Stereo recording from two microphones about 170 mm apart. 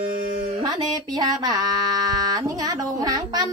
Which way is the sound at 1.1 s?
25° right (ahead or behind).